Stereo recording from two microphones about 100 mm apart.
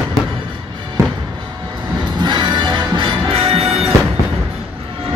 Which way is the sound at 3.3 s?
75° right (ahead or behind).